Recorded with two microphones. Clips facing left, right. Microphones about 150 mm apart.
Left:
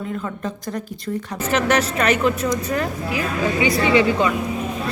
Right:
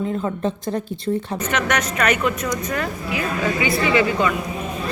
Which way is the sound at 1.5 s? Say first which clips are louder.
Left 5 dB; 30° left (ahead or behind).